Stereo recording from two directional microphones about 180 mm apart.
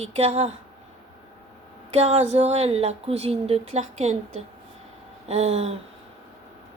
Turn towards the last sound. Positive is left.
turn(degrees=-35)  # may be behind; listen again after turning